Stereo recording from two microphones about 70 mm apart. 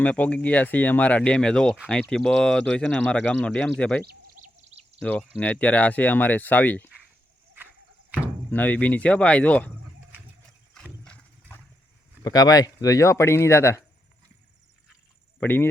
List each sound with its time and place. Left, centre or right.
0.0 s speech: left
5.4 s speech: left
8.4 s speech: left
11.0 s horse: centre
12.2 s speech: left
15.4 s speech: left